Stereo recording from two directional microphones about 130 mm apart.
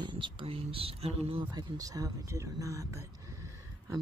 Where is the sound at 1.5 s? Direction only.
30° right (ahead or behind).